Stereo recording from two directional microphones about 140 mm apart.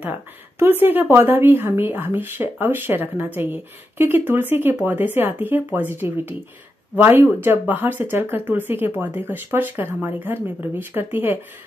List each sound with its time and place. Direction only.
0.0 s a woman's voice: 15° right (ahead or behind)